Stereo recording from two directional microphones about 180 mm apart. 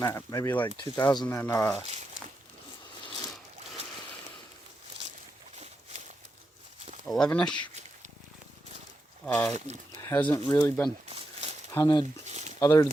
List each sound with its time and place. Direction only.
0.0 s speech: 20° left (ahead or behind)
1.3 s speech: 15° left (ahead or behind)
7.0 s speech: 5° left (ahead or behind)
9.2 s speech: 10° left (ahead or behind)
9.5 s speech: 40° right (ahead or behind)
10.0 s speech: 10° left (ahead or behind)
11.1 s a sound: 35° right (ahead or behind)
11.7 s speech: 20° left (ahead or behind)
12.2 s a sound: 40° right (ahead or behind)
12.5 s speech: 20° left (ahead or behind)